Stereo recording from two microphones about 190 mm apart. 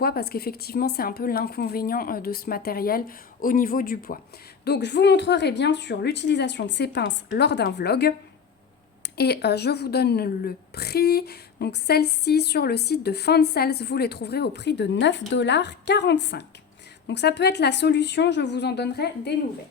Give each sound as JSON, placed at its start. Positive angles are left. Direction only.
{"t": 0.0, "sound": "a woman's voice", "side_deg": 55}
{"t": 4.6, "sound": "a woman's voice", "side_deg": 60}